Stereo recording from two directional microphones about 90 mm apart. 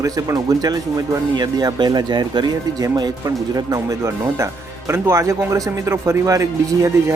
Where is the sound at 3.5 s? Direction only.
35° right (ahead or behind).